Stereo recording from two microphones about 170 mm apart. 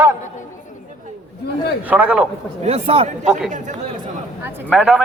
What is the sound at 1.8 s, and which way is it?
Speech, 10° right (ahead or behind).